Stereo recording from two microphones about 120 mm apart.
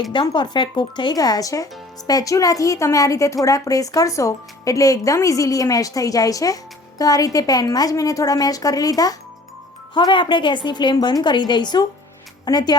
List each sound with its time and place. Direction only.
0.1 s a woman's voice: 40° left (ahead or behind)